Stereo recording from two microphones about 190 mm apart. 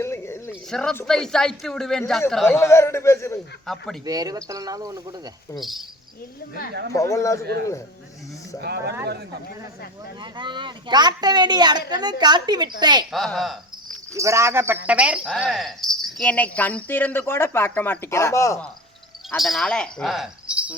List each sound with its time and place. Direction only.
0.0 s a sound: 15° left (ahead or behind)
0.7 s a man's voice: 5° left (ahead or behind)
2.6 s speech: 15° left (ahead or behind)
3.7 s a man's voice: centre (ahead or behind)
4.0 s speech: 20° right (ahead or behind)
5.5 s a man's voice: centre (ahead or behind)
6.9 s speech: 15° left (ahead or behind)
8.6 s speech: 60° right (ahead or behind)
10.2 s speech: 25° right (ahead or behind)
13.1 s a man's voice: centre (ahead or behind)
14.1 s speech: 15° right (ahead or behind); by 18.6 s 15° left (ahead or behind)
19.4 s speech: centre (ahead or behind)